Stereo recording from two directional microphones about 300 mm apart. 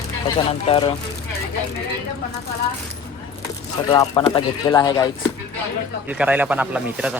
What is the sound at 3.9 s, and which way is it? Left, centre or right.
Speech, centre.